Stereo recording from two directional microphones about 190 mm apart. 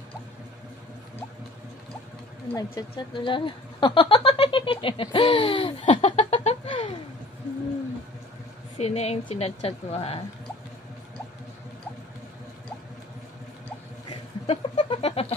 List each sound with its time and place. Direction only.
2.4 s speech: 15° left (ahead or behind)
8.7 s a woman's voice: 35° left (ahead or behind)
14.4 s a sound: 30° left (ahead or behind)